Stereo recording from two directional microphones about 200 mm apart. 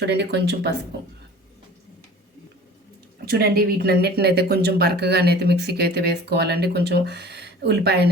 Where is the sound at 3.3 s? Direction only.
50° right (ahead or behind).